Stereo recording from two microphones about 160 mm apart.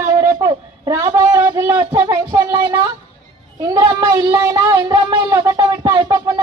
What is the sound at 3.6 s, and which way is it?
Child singing, 20° right (ahead or behind).